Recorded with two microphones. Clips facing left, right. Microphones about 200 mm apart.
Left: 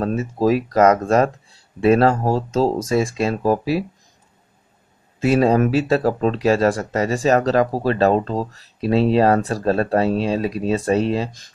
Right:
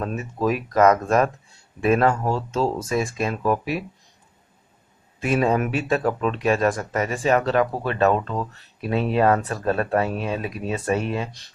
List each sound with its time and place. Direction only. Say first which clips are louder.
0.4 s speech: left 3 dB; 35° left (ahead or behind)
5.2 s speech: left 5 dB; 30° left (ahead or behind)